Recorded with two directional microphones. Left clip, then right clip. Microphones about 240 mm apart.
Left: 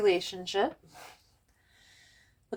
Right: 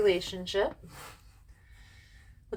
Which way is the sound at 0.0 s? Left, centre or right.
Left.